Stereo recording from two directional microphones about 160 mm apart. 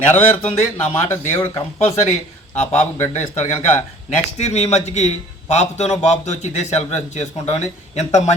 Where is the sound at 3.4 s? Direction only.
45° left (ahead or behind).